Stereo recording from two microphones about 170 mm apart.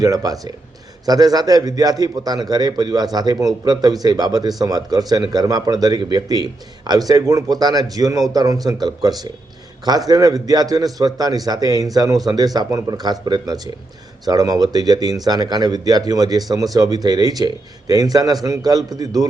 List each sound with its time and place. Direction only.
0.0 s speech: 20° right (ahead or behind)